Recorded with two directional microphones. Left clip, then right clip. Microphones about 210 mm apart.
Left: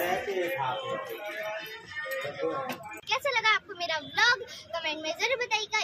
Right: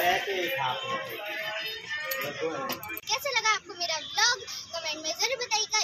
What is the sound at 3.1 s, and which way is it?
A child's voice, 5° left (ahead or behind).